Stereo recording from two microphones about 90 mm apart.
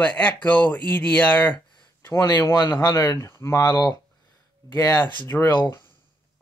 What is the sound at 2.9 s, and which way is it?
Speech, 35° left (ahead or behind).